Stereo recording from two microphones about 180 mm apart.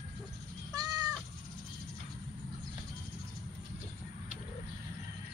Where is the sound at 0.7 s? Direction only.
20° right (ahead or behind).